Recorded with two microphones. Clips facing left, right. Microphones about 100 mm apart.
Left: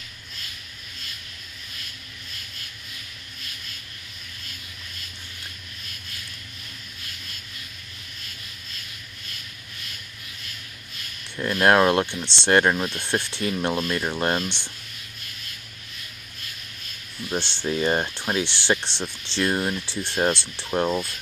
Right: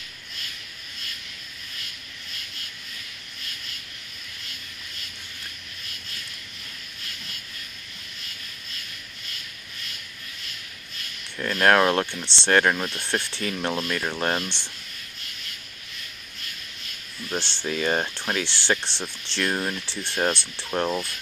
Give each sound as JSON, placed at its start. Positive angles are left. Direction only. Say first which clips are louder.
{"t": 11.3, "sound": "speech", "louder": "left 1 dB", "side_deg": 15}
{"t": 17.3, "sound": "speech", "louder": "left 2 dB", "side_deg": 15}